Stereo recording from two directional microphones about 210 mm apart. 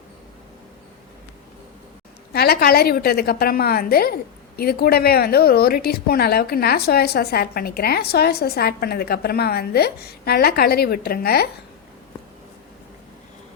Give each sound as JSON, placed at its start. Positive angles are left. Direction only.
{"t": 2.3, "sound": "a woman's voice", "side_deg": 45}